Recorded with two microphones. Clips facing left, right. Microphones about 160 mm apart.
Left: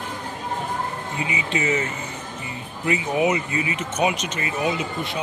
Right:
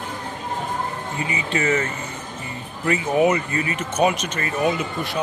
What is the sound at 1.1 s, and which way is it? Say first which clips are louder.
Speech: right 1 dB; 15° left (ahead or behind).